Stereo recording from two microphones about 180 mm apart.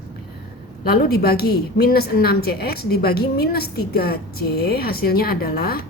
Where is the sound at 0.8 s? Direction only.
60° left (ahead or behind).